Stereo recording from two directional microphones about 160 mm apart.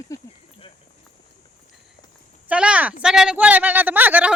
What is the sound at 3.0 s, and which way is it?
Speech, 5° right (ahead or behind).